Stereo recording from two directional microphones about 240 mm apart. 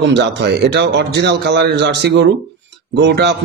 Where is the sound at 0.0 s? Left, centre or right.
Right.